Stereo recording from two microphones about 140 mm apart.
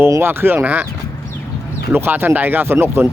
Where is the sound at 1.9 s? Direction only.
15° right (ahead or behind).